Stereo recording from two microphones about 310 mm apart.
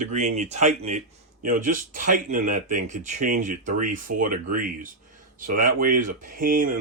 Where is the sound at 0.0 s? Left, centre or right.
Right.